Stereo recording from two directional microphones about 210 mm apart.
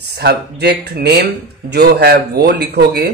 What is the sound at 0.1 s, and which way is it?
Speech, 50° right (ahead or behind).